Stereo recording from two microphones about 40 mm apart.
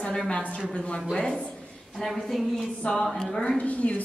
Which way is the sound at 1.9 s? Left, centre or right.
Centre.